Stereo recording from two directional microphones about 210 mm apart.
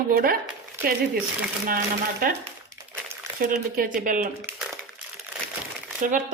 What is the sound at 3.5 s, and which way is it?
Speech, 40° right (ahead or behind).